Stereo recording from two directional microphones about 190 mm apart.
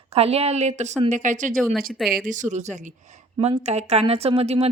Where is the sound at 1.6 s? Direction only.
Centre (ahead or behind).